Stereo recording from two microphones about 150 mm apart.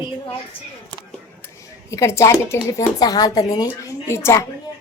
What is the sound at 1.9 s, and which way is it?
A woman's voice, 20° left (ahead or behind).